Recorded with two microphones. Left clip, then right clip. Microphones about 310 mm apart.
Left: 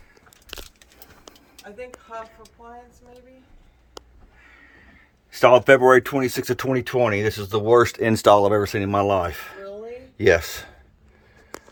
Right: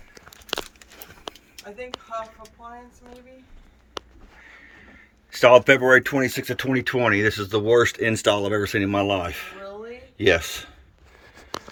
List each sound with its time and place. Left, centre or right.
5.3 s speech: centre